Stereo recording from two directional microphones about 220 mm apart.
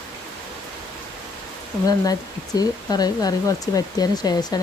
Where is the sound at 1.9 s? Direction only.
15° left (ahead or behind).